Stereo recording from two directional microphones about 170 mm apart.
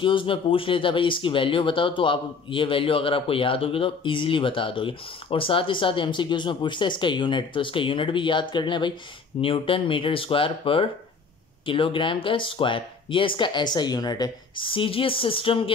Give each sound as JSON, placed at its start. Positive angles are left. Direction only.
{"t": 0.0, "sound": "speech", "side_deg": 30}